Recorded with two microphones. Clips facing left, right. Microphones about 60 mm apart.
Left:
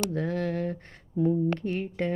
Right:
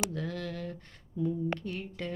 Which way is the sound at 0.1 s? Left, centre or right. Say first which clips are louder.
Left 8 dB; left.